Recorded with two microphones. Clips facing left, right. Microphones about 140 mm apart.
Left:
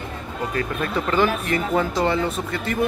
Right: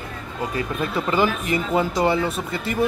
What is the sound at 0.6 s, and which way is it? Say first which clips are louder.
Speech: even; 10° right (ahead or behind).